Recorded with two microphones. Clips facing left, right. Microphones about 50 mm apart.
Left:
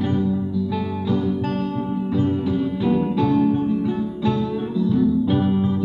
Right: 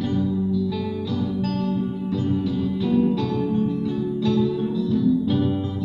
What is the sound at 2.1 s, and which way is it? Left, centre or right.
Music, left.